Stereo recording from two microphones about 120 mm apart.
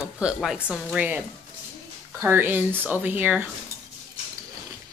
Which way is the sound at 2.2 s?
15° right (ahead or behind).